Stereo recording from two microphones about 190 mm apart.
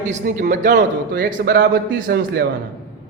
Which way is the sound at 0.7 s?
60° right (ahead or behind).